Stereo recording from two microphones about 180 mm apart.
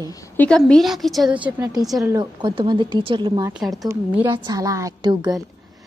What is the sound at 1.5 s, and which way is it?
Speech, 20° right (ahead or behind).